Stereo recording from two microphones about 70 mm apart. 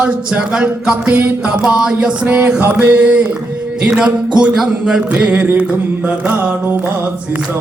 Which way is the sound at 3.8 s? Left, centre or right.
Centre.